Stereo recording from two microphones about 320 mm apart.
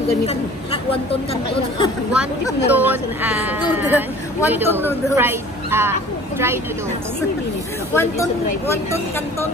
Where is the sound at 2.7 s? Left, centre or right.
Centre.